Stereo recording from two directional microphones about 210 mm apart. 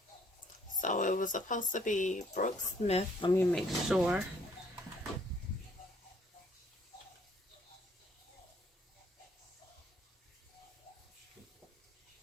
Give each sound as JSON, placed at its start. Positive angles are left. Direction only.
{"t": 0.7, "sound": "speech", "side_deg": 35}
{"t": 3.3, "sound": "speech", "side_deg": 0}